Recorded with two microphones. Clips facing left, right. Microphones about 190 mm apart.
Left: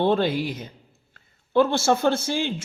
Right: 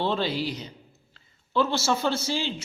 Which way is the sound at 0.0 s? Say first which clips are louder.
Left 5 dB; 50° left (ahead or behind).